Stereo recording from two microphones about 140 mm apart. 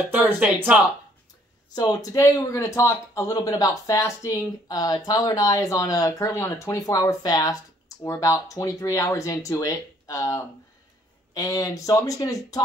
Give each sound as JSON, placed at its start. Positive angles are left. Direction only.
{"t": 0.1, "sound": "speech", "side_deg": -10}
{"t": 1.7, "sound": "speech", "side_deg": 25}